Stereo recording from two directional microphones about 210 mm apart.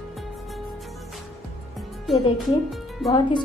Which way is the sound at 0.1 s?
Centre (ahead or behind).